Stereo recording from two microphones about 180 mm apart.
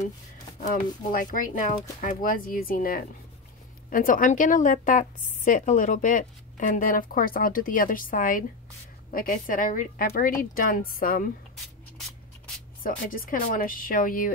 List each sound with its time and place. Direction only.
1.0 s a woman's voice: 45° left (ahead or behind)
12.8 s a woman's voice: 50° left (ahead or behind)